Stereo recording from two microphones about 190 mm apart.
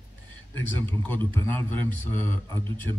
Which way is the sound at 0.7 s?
10° left (ahead or behind).